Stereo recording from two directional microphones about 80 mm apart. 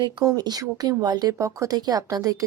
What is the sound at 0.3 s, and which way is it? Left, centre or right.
Speech, right.